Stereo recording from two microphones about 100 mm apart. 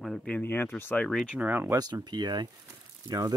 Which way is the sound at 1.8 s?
40° right (ahead or behind).